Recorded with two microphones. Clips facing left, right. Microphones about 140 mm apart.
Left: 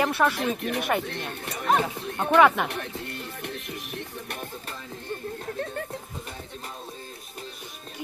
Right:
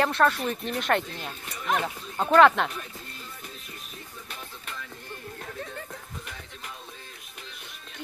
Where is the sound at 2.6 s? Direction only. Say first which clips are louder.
Left 5 dB; 70° left (ahead or behind).